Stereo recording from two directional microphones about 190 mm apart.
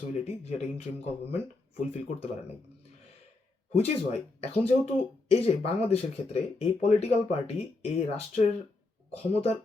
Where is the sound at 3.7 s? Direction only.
35° left (ahead or behind).